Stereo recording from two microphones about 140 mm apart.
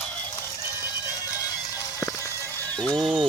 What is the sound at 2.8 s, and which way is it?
Speech, 5° left (ahead or behind).